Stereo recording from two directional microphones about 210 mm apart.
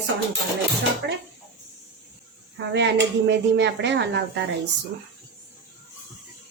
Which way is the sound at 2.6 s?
55° right (ahead or behind).